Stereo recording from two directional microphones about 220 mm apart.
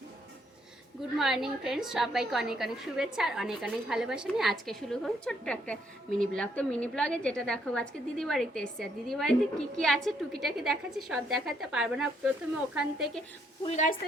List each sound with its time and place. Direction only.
1.2 s a woman's voice: centre (ahead or behind)
13.7 s a woman's voice: 35° left (ahead or behind)